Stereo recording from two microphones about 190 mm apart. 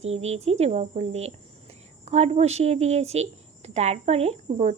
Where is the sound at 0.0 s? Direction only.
35° right (ahead or behind).